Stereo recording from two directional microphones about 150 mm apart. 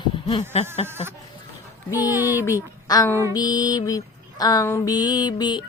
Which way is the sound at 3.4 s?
30° left (ahead or behind).